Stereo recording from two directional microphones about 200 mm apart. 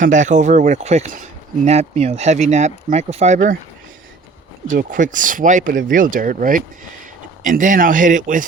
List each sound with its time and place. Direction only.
0.0 s speech: 40° right (ahead or behind)
4.7 s speech: 40° right (ahead or behind)